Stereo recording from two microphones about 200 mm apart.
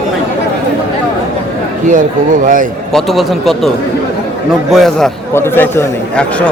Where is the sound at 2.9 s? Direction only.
Centre (ahead or behind).